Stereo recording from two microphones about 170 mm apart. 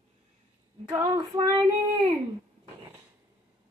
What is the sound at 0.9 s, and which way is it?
Female singing, 20° right (ahead or behind).